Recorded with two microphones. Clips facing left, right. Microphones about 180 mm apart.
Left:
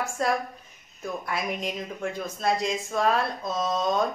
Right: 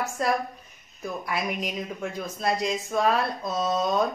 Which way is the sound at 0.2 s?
Centre (ahead or behind).